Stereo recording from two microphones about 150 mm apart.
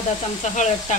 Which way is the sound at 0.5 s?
50° left (ahead or behind).